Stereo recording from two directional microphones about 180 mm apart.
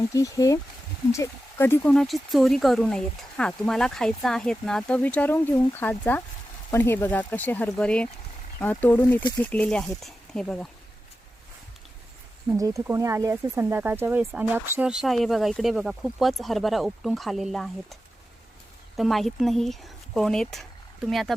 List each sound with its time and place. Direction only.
0.1 s speech: 20° left (ahead or behind)
12.5 s speech: 20° right (ahead or behind); by 17.9 s centre (ahead or behind)
18.9 s speech: centre (ahead or behind)